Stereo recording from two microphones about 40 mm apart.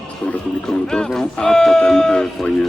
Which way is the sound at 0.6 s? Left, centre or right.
Centre.